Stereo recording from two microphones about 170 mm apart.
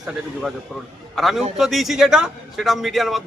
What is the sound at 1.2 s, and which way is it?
A man's voice, centre (ahead or behind).